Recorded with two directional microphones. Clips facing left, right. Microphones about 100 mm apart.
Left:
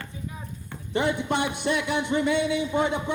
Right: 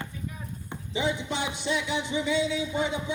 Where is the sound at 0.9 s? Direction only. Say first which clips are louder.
Left 4 dB; 55° left (ahead or behind).